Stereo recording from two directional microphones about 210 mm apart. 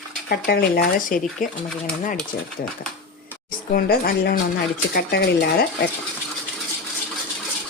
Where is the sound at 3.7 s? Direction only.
45° left (ahead or behind).